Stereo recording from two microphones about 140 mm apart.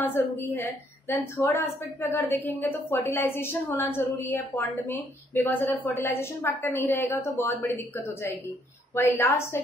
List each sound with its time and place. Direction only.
0.0 s a woman's voice: 15° left (ahead or behind)